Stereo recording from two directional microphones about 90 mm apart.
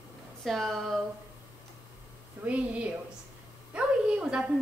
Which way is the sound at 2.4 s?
15° right (ahead or behind).